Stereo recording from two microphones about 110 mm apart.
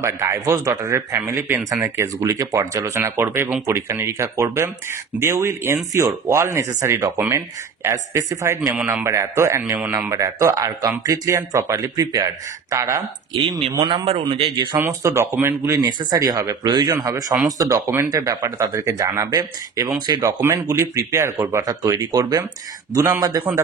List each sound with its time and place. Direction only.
0.0 s a man's voice: 25° right (ahead or behind)
14.3 s speech: 55° right (ahead or behind)
14.8 s a man's voice: 20° right (ahead or behind)
15.8 s speech: 35° right (ahead or behind)
20.2 s a man's voice: 25° right (ahead or behind)